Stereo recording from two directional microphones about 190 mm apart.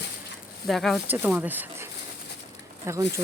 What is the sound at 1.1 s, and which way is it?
Speech, 10° right (ahead or behind).